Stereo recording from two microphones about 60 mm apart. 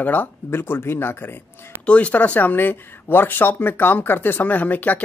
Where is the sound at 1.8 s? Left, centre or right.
Left.